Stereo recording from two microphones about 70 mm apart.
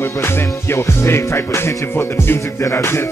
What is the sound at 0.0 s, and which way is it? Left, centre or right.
Music, left.